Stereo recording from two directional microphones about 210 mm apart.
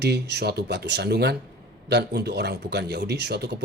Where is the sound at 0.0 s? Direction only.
50° right (ahead or behind).